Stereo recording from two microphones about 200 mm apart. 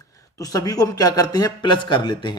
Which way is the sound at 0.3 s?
15° left (ahead or behind).